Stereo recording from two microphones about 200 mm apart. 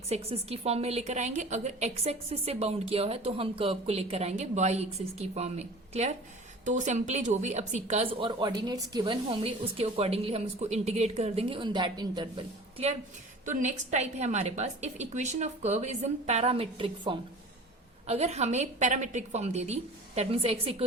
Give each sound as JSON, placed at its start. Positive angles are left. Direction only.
{"t": 0.1, "sound": "a woman's voice", "side_deg": -30}
{"t": 13.4, "sound": "a woman's voice", "side_deg": -40}